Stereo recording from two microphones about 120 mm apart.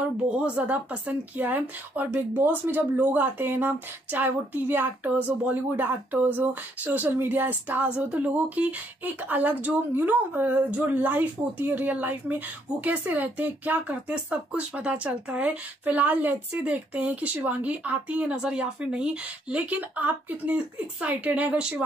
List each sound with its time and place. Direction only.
0.4 s speech: 10° right (ahead or behind)